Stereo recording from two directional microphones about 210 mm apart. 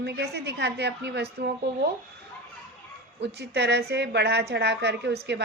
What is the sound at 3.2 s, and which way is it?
A woman's voice, 55° right (ahead or behind).